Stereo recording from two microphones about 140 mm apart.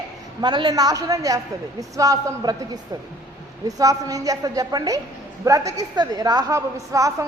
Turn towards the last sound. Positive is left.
turn(degrees=-20)  # may be behind; listen again after turning